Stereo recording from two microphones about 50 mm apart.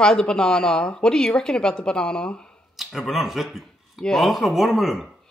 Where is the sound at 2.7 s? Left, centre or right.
Centre.